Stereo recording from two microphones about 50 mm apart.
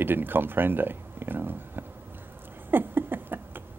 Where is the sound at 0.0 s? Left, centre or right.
Right.